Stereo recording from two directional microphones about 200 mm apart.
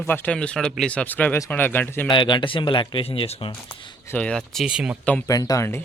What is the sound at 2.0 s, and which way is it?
Speech, 25° left (ahead or behind).